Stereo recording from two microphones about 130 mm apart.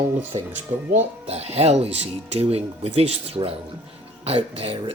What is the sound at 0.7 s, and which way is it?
Speech, 60° right (ahead or behind).